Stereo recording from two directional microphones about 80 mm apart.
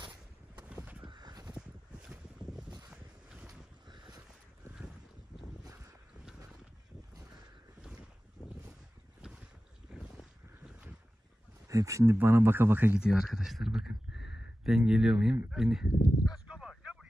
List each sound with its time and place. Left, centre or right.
1.0 s crow: right
3.4 s boat: right
9.2 s boat: centre
9.9 s a sound: centre
11.6 s speech: right
12.9 s speech: centre
16.4 s a sound: centre